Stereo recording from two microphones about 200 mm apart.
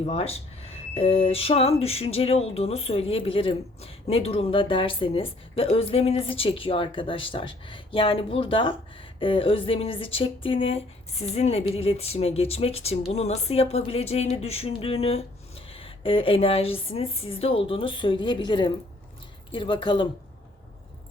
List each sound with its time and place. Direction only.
0.0 s a woman's voice: 30° left (ahead or behind)